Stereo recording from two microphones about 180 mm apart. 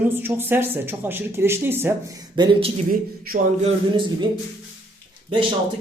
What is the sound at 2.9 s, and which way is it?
Speech, 50° right (ahead or behind).